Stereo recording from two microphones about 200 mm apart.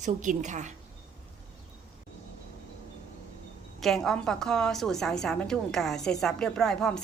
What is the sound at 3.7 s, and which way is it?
A woman's voice, centre (ahead or behind).